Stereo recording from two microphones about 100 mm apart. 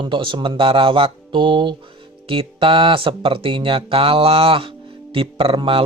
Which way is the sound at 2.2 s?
65° right (ahead or behind).